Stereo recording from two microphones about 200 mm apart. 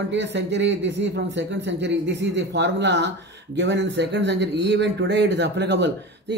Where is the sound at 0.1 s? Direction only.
60° right (ahead or behind).